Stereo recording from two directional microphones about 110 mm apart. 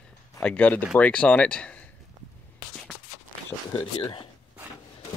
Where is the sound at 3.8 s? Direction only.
50° left (ahead or behind).